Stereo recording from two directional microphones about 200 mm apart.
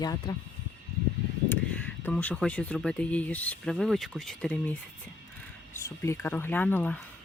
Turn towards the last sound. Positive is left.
turn(degrees=10)  # may be behind; listen again after turning